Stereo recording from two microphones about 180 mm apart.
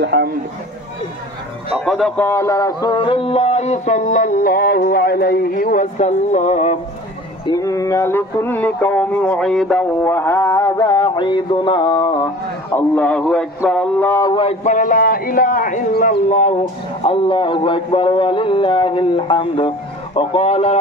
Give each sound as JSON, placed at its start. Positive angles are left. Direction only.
{"t": 0.0, "sound": "speech", "side_deg": -65}
{"t": 1.9, "sound": "music", "side_deg": 5}
{"t": 7.4, "sound": "a sound", "side_deg": 20}
{"t": 12.7, "sound": "a sound", "side_deg": 5}
{"t": 14.3, "sound": "a man's voice", "side_deg": 35}
{"t": 17.0, "sound": "a man's voice", "side_deg": 30}
{"t": 20.2, "sound": "music", "side_deg": 35}